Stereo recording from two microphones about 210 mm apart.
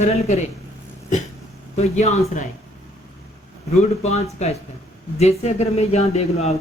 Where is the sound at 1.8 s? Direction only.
30° left (ahead or behind).